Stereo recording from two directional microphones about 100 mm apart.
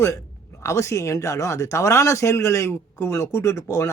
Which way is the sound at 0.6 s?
30° left (ahead or behind).